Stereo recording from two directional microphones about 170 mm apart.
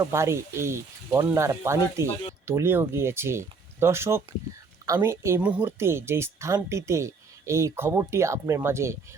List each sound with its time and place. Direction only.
0.0 s speech: 15° right (ahead or behind)